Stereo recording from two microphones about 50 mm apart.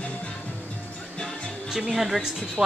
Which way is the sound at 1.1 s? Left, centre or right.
Centre.